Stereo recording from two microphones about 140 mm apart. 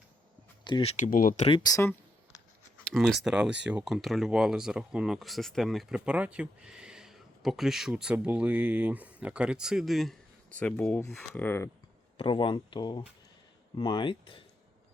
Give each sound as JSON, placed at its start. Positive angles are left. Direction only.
{"t": 0.6, "sound": "a sound", "side_deg": 35}
{"t": 0.9, "sound": "speech", "side_deg": 60}
{"t": 1.5, "sound": "speech", "side_deg": 35}
{"t": 2.9, "sound": "speech", "side_deg": 0}
{"t": 12.1, "sound": "speech", "side_deg": 40}